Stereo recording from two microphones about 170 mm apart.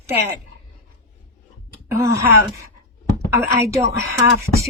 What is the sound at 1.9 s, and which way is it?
Speech, 15° right (ahead or behind).